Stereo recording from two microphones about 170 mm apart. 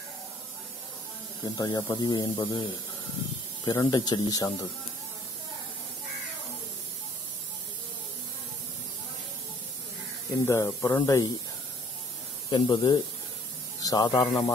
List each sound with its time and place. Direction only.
1.4 s speech: 25° left (ahead or behind)
3.6 s speech: 20° left (ahead or behind)
10.4 s speech: 20° left (ahead or behind)
12.4 s speech: 25° left (ahead or behind)